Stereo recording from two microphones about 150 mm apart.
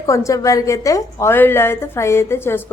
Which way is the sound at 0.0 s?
20° left (ahead or behind).